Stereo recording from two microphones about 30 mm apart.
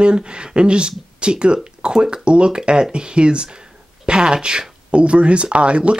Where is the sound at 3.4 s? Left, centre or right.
Right.